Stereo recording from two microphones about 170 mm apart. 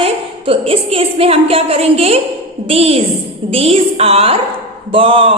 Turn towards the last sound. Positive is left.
turn(degrees=-30)  # may be behind; listen again after turning